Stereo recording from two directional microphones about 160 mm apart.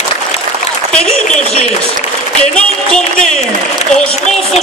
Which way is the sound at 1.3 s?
45° left (ahead or behind).